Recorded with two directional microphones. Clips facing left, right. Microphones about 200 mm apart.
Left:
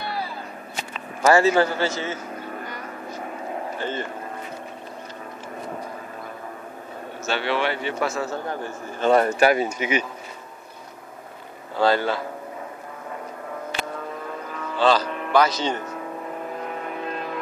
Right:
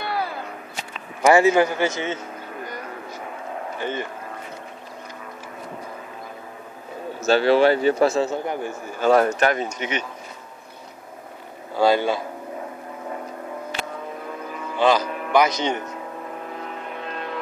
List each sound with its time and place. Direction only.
0.0 s whip: 55° right (ahead or behind)
1.2 s a man's voice: 15° right (ahead or behind)
3.8 s a man's voice: 15° right (ahead or behind)
7.2 s speech: 40° right (ahead or behind)
8.3 s a man's voice: 15° right (ahead or behind)
9.0 s speech: centre (ahead or behind)
11.7 s a man's voice: 15° right (ahead or behind)
14.8 s cattle: 15° right (ahead or behind)
15.3 s a man's voice: 15° right (ahead or behind)